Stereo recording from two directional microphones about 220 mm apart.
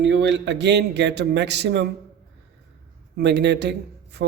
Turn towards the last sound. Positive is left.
turn(degrees=-50)  # may be behind; listen again after turning